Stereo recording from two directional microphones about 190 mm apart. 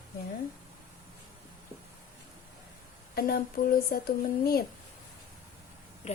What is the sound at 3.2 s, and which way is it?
A woman's voice, 50° left (ahead or behind).